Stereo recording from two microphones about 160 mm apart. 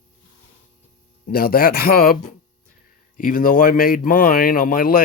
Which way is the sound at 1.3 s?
70° left (ahead or behind).